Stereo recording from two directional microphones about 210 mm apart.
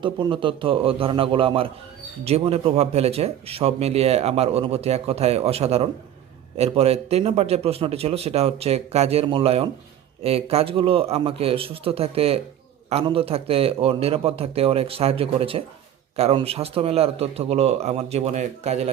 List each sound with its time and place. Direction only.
0.0 s speech: 20° right (ahead or behind)